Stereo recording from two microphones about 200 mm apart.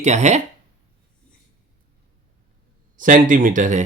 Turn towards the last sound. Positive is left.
turn(degrees=-40)  # may be behind; listen again after turning